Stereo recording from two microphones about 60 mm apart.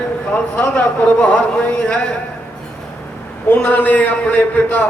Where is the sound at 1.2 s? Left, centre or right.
Centre.